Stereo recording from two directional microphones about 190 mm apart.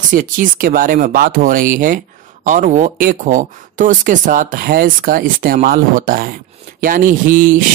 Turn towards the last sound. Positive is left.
turn(degrees=-45)  # may be behind; listen again after turning